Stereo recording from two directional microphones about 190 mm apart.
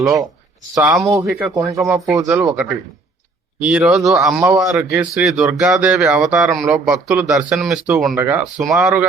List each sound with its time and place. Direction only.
0.8 s speech: 5° right (ahead or behind)
1.3 s speech: 5° right (ahead or behind)
8.1 s speech: 15° right (ahead or behind)